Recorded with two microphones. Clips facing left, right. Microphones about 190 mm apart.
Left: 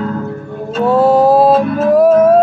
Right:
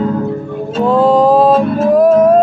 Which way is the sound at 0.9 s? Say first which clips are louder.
Even; 5° left (ahead or behind).